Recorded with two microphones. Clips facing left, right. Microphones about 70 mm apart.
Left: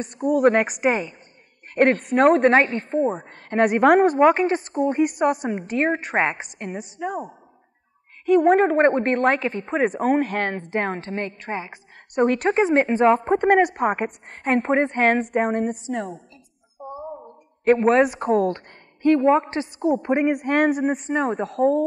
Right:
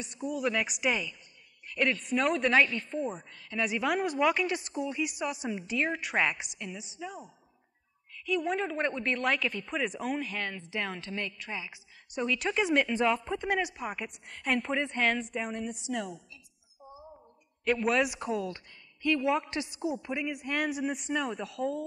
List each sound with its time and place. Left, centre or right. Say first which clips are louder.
0.0 s speech: left 14 dB; left
16.8 s a sound: left 16 dB; left
19.0 s speech: left 11 dB; left